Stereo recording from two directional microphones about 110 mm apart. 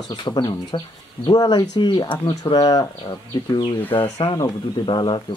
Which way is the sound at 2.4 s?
35° left (ahead or behind).